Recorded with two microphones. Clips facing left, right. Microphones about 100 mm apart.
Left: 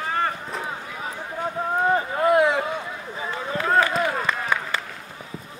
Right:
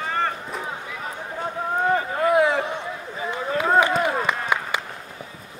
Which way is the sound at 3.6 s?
15° right (ahead or behind).